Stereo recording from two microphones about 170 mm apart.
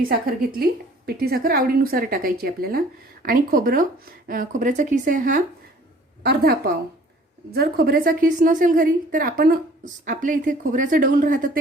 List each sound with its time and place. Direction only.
0.1 s a woman's voice: 60° right (ahead or behind)
6.2 s a woman's voice: 65° right (ahead or behind)